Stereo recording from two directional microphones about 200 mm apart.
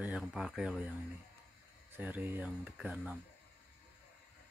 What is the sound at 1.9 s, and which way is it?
Speech, 10° right (ahead or behind).